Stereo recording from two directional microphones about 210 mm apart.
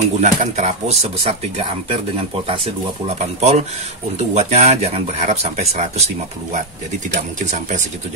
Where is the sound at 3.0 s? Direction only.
30° right (ahead or behind).